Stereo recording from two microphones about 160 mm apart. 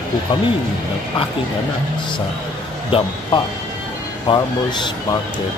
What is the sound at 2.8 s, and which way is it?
Speech, 35° left (ahead or behind).